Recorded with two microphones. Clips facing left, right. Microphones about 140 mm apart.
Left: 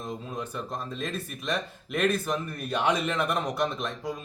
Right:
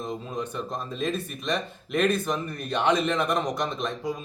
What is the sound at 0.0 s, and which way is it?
Speech, 5° left (ahead or behind).